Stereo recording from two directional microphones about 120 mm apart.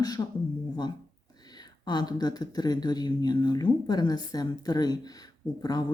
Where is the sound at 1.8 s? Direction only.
35° left (ahead or behind).